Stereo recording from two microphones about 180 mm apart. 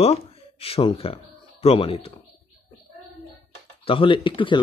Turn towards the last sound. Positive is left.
turn(degrees=25)  # may be behind; listen again after turning